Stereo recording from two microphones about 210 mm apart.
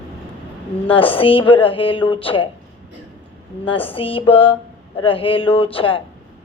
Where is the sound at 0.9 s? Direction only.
25° left (ahead or behind).